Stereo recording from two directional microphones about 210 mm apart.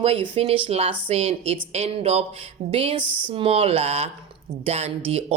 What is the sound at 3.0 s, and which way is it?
Speech, 5° right (ahead or behind).